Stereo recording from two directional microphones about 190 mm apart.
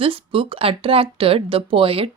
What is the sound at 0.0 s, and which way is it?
Speech, 30° right (ahead or behind).